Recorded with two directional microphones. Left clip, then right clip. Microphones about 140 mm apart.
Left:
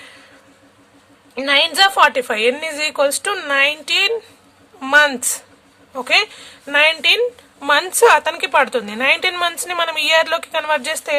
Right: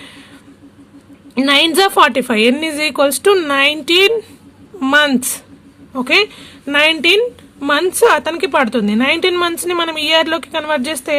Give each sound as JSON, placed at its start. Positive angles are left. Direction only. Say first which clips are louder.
{"t": 1.4, "sound": "a woman's voice", "louder": "right 2 dB", "side_deg": -30}
{"t": 7.6, "sound": "speech", "louder": "right 1 dB", "side_deg": -5}